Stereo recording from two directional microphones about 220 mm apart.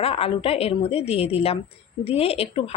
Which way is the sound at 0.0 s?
25° left (ahead or behind).